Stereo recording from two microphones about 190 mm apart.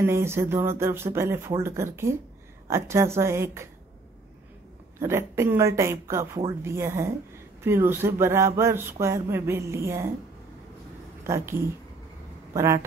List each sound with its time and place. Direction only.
0.0 s speech: 15° right (ahead or behind)
4.9 s speech: 15° right (ahead or behind)
11.2 s speech: 15° right (ahead or behind)